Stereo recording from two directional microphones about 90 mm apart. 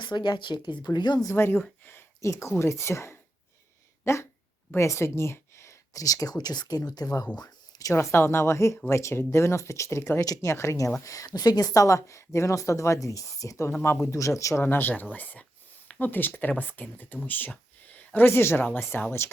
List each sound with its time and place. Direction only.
0.0 s speech: 60° left (ahead or behind)
1.3 s speech: 25° left (ahead or behind)
4.0 s a sound: 30° left (ahead or behind)
4.8 s speech: 30° left (ahead or behind)
7.3 s a sound: 45° left (ahead or behind)
7.9 s speech: 25° left (ahead or behind)
10.2 s speech: 40° left (ahead or behind)
14.6 s speech: 20° left (ahead or behind)